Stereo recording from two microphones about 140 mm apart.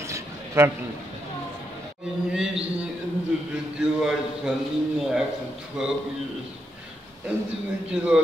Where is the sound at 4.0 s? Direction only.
Centre (ahead or behind).